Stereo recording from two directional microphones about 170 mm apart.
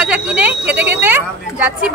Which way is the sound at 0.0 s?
5° right (ahead or behind).